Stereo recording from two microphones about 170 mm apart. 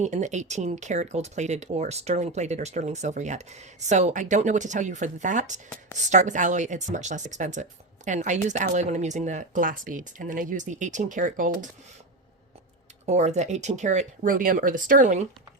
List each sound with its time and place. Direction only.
0.0 s speech: 45° right (ahead or behind)
13.1 s speech: 40° right (ahead or behind)